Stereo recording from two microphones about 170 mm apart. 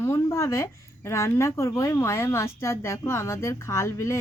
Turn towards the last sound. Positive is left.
turn(degrees=15)  # may be behind; listen again after turning